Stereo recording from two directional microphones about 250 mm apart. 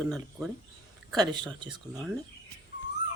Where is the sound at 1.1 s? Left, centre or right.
Centre.